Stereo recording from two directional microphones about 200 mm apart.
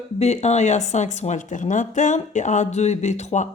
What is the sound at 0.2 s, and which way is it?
A woman's voice, 35° left (ahead or behind).